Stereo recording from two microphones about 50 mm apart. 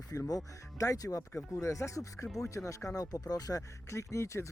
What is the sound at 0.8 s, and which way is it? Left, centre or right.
Speech, left.